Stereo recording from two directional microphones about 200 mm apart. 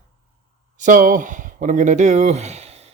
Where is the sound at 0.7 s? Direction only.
40° right (ahead or behind).